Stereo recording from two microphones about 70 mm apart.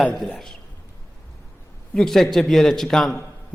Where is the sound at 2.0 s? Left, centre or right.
Centre.